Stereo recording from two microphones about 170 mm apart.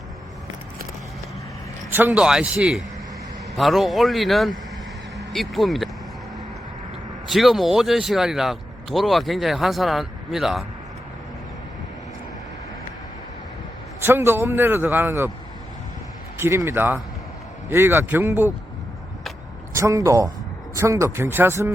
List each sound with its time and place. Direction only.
1.9 s speech: 10° right (ahead or behind)
7.3 s speech: centre (ahead or behind)
14.0 s a man's voice: 15° right (ahead or behind)
16.4 s a man's voice: 15° right (ahead or behind)
19.7 s a man's voice: 20° right (ahead or behind)